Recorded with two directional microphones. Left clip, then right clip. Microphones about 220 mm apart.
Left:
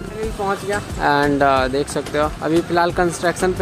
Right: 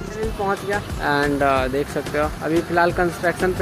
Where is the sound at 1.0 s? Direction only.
20° left (ahead or behind).